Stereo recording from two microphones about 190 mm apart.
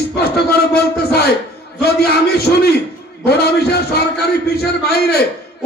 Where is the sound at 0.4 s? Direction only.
55° left (ahead or behind).